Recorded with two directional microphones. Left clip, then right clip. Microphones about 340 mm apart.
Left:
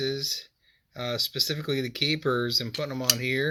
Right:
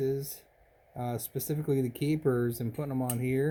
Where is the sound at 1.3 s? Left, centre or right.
Centre.